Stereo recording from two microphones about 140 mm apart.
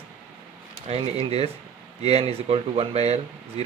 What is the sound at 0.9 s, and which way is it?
Speech, 45° right (ahead or behind).